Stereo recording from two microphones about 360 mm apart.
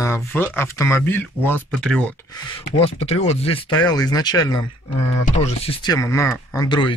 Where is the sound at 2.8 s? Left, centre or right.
Centre.